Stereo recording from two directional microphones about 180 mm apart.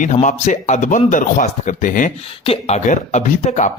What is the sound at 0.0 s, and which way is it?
Speech, 45° left (ahead or behind).